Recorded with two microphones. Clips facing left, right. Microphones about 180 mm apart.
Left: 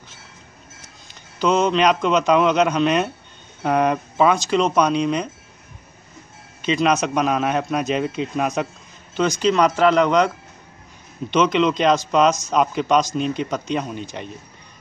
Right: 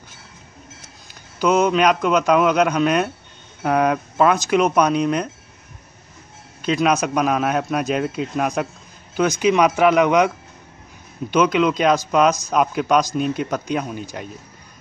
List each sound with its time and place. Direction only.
1.4 s a man's voice: 5° right (ahead or behind)
6.6 s a man's voice: 5° right (ahead or behind)
9.4 s a man's voice: 10° right (ahead or behind)